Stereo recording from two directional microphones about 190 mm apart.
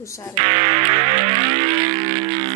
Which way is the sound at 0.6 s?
30° right (ahead or behind).